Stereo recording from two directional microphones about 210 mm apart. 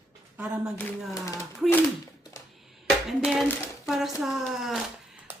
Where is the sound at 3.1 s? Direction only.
Centre (ahead or behind).